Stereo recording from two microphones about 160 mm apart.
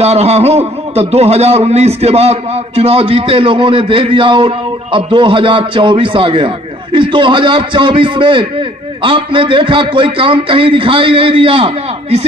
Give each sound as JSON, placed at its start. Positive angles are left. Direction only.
{"t": 0.0, "sound": "a man's voice", "side_deg": -40}